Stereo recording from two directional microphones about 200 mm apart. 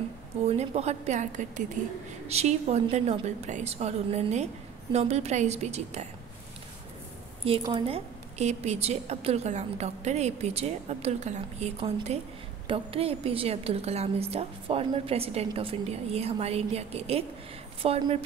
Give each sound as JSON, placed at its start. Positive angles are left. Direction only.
{"t": 0.5, "sound": "a woman's voice", "side_deg": -30}
{"t": 7.4, "sound": "a woman's voice", "side_deg": -25}